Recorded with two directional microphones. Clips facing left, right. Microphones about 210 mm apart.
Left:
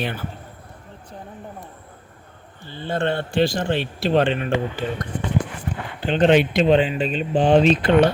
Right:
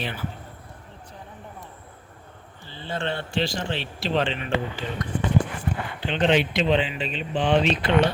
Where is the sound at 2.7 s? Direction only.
55° left (ahead or behind).